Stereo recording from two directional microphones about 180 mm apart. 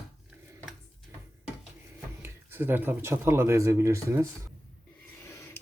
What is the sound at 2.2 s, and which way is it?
Speech, 10° right (ahead or behind).